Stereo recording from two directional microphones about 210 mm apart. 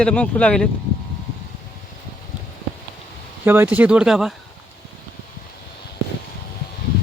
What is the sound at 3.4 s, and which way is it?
Speech, 10° right (ahead or behind).